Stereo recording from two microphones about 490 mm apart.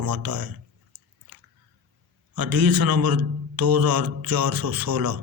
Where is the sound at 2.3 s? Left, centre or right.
Right.